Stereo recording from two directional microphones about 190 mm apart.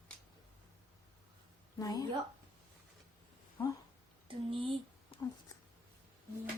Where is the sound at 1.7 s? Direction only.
20° left (ahead or behind).